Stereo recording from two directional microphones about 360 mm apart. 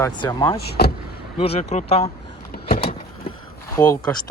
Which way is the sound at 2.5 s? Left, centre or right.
Centre.